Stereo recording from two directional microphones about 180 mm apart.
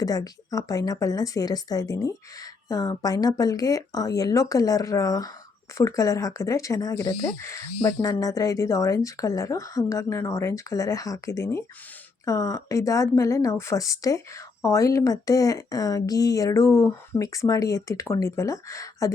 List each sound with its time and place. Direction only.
0.0 s speech: 20° left (ahead or behind)